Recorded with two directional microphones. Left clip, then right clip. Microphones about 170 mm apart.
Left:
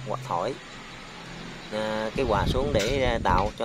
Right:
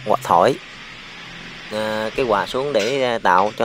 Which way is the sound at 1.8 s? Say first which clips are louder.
Right 6 dB; 30° right (ahead or behind).